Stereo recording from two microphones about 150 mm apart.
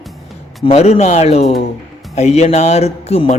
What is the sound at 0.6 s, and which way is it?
Speech, 45° left (ahead or behind).